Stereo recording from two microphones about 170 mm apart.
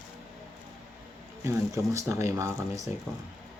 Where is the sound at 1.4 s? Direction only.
15° right (ahead or behind).